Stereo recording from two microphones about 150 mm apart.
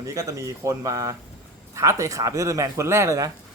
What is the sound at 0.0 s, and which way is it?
Speech, 20° right (ahead or behind).